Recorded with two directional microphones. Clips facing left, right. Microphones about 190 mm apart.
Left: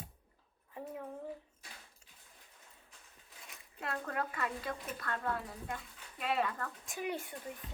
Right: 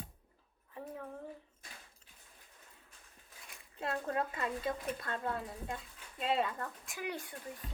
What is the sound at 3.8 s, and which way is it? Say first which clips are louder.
Speech: right 3 dB; 25° right (ahead or behind).